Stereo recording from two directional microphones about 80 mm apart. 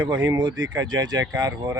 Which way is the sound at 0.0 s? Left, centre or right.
Right.